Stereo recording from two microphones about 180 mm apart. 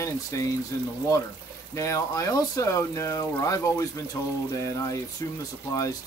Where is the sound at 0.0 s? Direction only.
15° left (ahead or behind).